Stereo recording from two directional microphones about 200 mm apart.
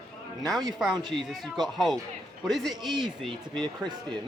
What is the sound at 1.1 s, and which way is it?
Speech, centre (ahead or behind).